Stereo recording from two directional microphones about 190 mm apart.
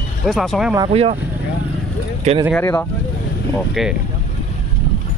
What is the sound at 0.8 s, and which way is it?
Speech, 30° right (ahead or behind).